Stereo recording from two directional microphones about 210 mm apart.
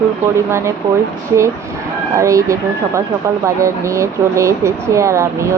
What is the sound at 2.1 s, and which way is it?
Speech, 15° right (ahead or behind).